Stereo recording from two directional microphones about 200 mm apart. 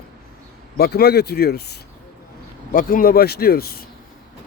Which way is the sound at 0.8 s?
50° left (ahead or behind).